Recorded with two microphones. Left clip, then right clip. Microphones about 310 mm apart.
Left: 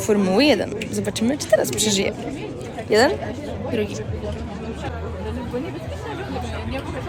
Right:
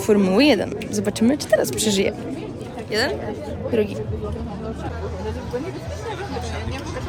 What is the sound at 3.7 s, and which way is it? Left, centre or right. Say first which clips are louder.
Speech: right 4 dB; centre.